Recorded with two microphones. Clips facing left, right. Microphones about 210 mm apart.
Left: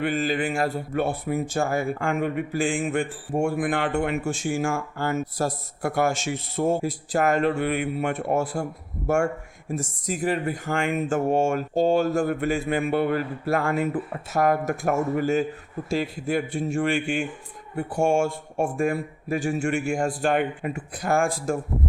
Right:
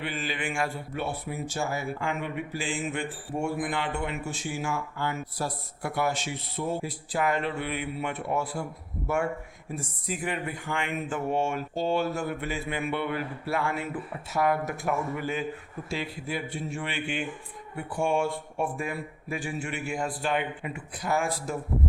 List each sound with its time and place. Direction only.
0.0 s speech: 45° left (ahead or behind)